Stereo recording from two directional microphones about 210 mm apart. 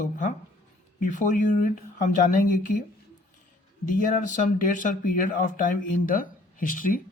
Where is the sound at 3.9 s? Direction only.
40° left (ahead or behind).